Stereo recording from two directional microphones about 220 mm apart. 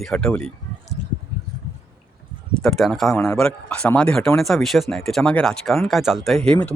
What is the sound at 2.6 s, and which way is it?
Speech, centre (ahead or behind).